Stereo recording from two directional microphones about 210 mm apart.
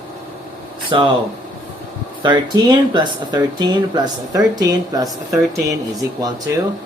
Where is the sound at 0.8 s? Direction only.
25° right (ahead or behind).